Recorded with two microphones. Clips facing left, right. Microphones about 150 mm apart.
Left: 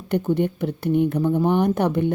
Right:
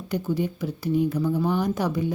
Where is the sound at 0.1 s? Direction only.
60° left (ahead or behind).